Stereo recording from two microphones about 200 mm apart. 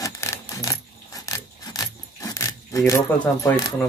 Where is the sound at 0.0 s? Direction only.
15° left (ahead or behind).